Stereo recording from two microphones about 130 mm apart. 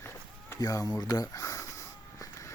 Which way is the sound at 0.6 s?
25° left (ahead or behind).